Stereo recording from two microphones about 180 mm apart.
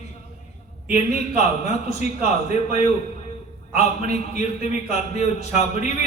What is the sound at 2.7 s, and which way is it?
A man's voice, 35° left (ahead or behind).